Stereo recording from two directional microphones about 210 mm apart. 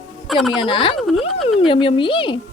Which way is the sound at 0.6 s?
25° left (ahead or behind).